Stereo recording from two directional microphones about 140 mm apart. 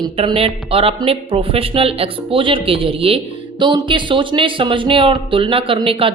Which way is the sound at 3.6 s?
30° right (ahead or behind).